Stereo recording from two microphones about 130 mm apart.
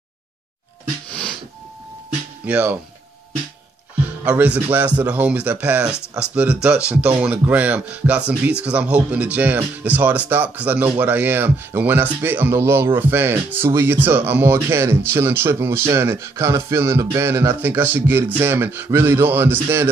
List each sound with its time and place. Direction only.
2.4 s speech: 10° right (ahead or behind)
4.3 s speech: 10° right (ahead or behind)